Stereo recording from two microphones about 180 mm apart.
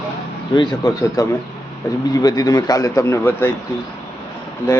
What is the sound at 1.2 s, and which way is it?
A man's voice, 20° left (ahead or behind).